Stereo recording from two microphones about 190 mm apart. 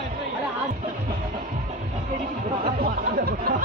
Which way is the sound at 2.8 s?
50° right (ahead or behind).